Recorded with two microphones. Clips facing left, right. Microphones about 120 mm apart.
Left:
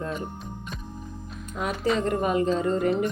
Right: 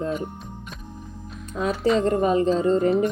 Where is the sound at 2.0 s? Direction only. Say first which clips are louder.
Right 4 dB; 30° right (ahead or behind).